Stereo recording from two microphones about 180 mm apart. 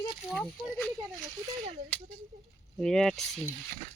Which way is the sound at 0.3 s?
Centre (ahead or behind).